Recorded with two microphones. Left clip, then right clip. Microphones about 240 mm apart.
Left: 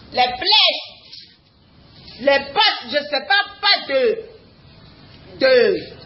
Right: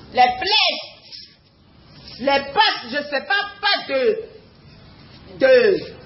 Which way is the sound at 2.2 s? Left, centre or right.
Centre.